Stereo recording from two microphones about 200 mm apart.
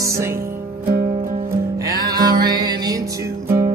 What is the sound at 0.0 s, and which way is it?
Music, 15° right (ahead or behind).